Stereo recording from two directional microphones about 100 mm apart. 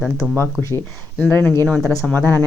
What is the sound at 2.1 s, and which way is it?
Speech, 20° left (ahead or behind).